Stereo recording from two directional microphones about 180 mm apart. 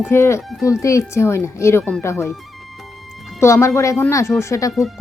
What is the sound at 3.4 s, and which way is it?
Speech, 15° left (ahead or behind).